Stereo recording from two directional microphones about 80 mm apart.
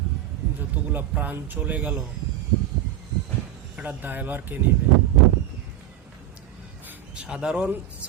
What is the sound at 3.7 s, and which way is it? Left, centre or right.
Speech, right.